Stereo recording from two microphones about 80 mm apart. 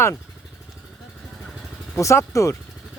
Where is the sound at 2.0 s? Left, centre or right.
Left.